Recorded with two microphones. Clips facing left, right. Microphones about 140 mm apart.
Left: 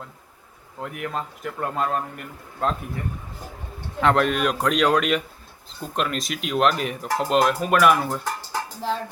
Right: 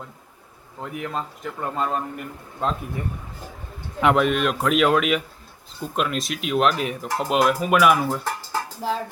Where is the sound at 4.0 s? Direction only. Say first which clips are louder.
Right 1 dB; 5° right (ahead or behind).